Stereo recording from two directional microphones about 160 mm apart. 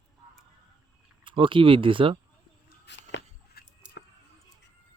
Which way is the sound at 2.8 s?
90° left.